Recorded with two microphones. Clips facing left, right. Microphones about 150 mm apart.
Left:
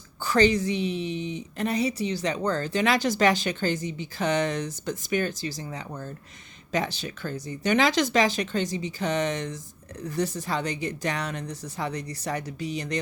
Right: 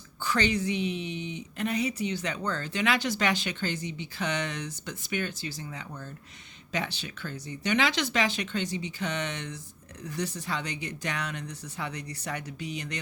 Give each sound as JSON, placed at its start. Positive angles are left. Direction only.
{"t": 0.2, "sound": "a woman's voice", "side_deg": 40}